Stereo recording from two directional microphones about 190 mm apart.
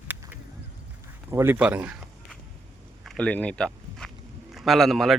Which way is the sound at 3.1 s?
5° left (ahead or behind).